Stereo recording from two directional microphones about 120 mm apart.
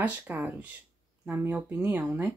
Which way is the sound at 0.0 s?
10° right (ahead or behind).